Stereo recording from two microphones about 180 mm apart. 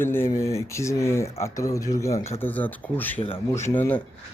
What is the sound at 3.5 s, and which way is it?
Speech, 15° left (ahead or behind).